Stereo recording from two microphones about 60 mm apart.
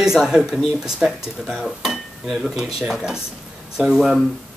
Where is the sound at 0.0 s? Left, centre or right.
Centre.